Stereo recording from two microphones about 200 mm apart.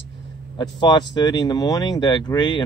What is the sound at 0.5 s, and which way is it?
Speech, 20° left (ahead or behind).